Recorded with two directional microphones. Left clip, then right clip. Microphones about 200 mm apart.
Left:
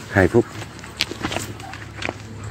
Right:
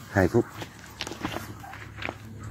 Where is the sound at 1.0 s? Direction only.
35° left (ahead or behind).